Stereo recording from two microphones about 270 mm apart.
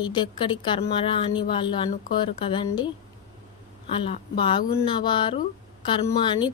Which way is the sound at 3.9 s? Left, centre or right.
Centre.